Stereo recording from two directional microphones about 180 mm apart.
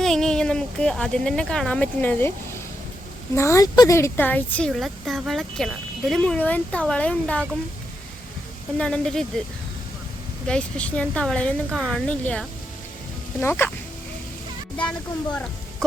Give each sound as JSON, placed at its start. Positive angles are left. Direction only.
{"t": 0.0, "sound": "a woman's voice", "side_deg": 5}
{"t": 8.8, "sound": "a woman's voice", "side_deg": 5}
{"t": 10.4, "sound": "a woman's voice", "side_deg": 5}
{"t": 14.8, "sound": "a woman's voice", "side_deg": 5}